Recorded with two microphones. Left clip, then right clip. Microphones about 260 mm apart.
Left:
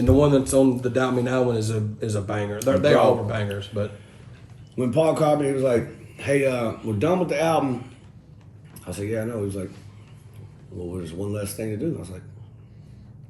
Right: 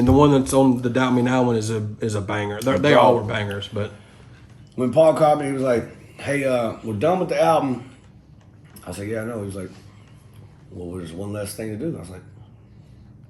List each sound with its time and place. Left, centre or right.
0.1 s a man's voice: right
4.7 s speech: centre
9.0 s speech: centre
10.9 s speech: centre